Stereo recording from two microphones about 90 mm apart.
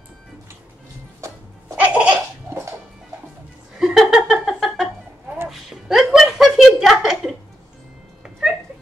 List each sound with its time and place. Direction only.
1.8 s laughter: 15° right (ahead or behind)
3.8 s a sound: 5° right (ahead or behind)
5.5 s music: 5° right (ahead or behind)
8.2 s cat: 10° right (ahead or behind)